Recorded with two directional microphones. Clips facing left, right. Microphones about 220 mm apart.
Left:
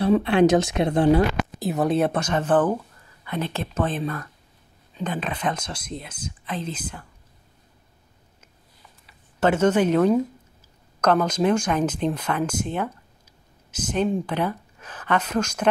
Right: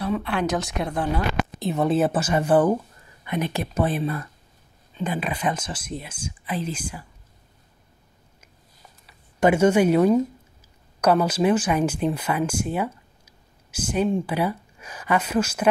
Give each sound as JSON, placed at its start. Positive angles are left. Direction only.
{"t": 0.0, "sound": "speech", "side_deg": 25}
{"t": 1.6, "sound": "speech", "side_deg": 0}
{"t": 9.4, "sound": "speech", "side_deg": -10}